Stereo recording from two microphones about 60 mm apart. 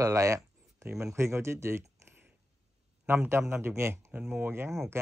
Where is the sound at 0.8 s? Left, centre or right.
Right.